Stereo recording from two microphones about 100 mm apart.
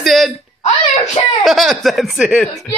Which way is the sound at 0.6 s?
85° left.